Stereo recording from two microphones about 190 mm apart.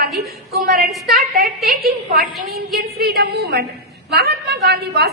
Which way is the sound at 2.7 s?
55° right (ahead or behind).